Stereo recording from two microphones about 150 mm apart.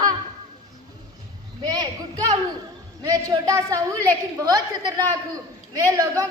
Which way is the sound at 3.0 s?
25° right (ahead or behind).